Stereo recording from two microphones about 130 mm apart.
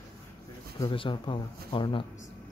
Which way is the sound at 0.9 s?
40° left (ahead or behind).